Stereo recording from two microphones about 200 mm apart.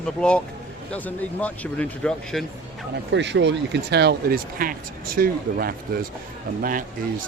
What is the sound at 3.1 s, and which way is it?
Speech, 60° right (ahead or behind).